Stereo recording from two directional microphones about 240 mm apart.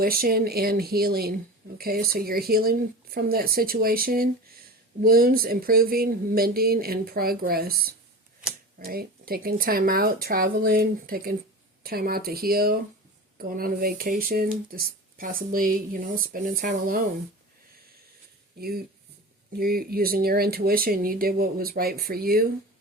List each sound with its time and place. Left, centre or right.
0.0 s speech: right
18.6 s speech: right